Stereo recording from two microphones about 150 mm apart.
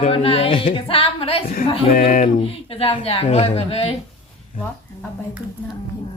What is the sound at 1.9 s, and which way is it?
Speech, 65° left (ahead or behind).